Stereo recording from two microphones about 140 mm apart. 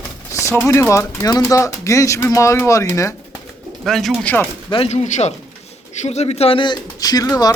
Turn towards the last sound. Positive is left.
turn(degrees=25)  # may be behind; listen again after turning